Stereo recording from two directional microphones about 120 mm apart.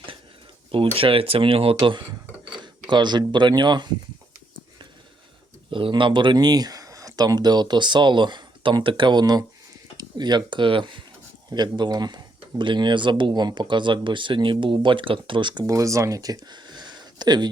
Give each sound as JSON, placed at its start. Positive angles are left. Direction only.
{"t": 0.9, "sound": "speech", "side_deg": -50}
{"t": 5.7, "sound": "speech", "side_deg": -45}
{"t": 15.6, "sound": "speech", "side_deg": -25}